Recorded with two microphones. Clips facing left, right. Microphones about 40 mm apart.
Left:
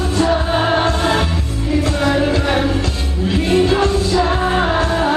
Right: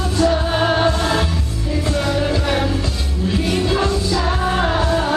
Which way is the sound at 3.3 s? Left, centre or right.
Left.